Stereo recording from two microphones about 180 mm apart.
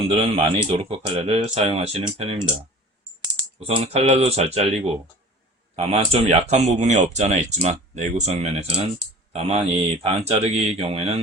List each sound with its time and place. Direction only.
0.1 s speech: 35° right (ahead or behind)
3.6 s speech: 30° right (ahead or behind)
5.7 s speech: 35° right (ahead or behind)